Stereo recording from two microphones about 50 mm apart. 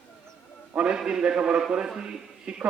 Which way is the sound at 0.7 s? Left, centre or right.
Centre.